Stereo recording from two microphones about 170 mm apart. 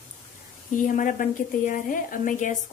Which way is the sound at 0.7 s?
50° left (ahead or behind).